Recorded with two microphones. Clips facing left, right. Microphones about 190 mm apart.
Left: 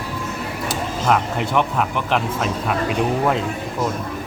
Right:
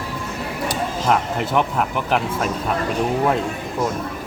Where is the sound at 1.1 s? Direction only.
Centre (ahead or behind).